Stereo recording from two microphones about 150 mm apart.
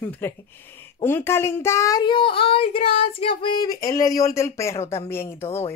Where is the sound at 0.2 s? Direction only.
10° left (ahead or behind).